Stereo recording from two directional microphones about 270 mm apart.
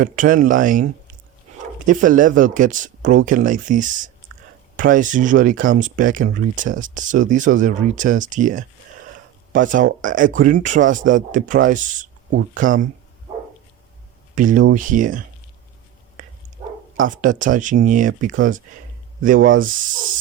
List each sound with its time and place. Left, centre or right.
0.0 s speech: right
1.9 s speech: right
14.3 s speech: right
16.2 s dog: right
17.2 s speech: right